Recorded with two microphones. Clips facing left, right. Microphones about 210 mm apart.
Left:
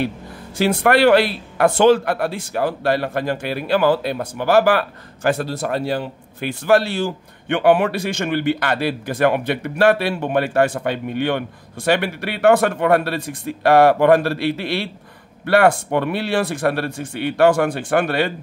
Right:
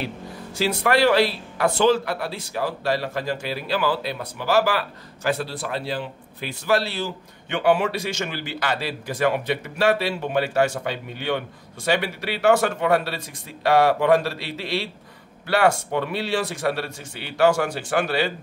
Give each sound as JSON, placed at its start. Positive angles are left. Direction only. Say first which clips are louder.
{"t": 0.6, "sound": "speech", "louder": "left 5 dB", "side_deg": 55}